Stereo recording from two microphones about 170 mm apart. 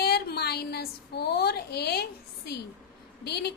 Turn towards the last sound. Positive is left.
turn(degrees=70)  # may be behind; listen again after turning